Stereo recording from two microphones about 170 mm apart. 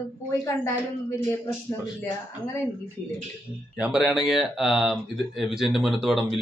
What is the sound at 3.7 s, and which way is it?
Speech, 5° right (ahead or behind).